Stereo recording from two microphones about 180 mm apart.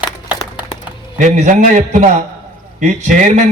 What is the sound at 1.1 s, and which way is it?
Speech, 45° right (ahead or behind).